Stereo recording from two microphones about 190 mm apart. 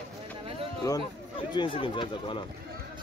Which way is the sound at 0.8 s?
20° left (ahead or behind).